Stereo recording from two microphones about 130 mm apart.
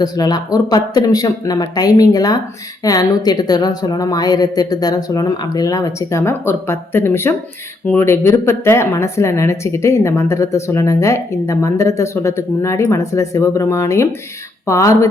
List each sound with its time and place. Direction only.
0.0 s a woman's voice: 30° left (ahead or behind)